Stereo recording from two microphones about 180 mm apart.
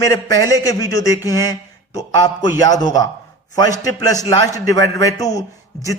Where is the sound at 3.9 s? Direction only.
20° left (ahead or behind).